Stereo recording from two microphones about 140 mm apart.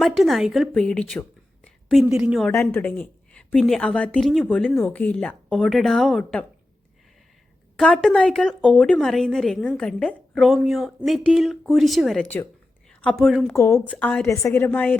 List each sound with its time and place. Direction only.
0.0 s a woman's voice: centre (ahead or behind)
2.5 s speech: 15° left (ahead or behind)
3.5 s a woman's voice: centre (ahead or behind)
7.8 s a woman's voice: centre (ahead or behind)
13.5 s speech: 20° left (ahead or behind)
13.9 s a woman's voice: 10° left (ahead or behind)
14.3 s a woman's voice: 20° left (ahead or behind)